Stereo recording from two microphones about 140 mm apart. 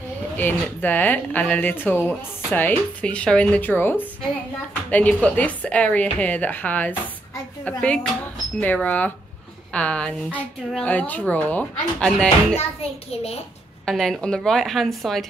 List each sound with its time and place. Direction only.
0.4 s speech: 15° left (ahead or behind)
13.8 s a woman's voice: centre (ahead or behind)